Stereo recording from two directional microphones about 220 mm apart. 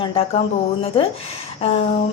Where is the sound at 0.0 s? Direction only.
25° left (ahead or behind).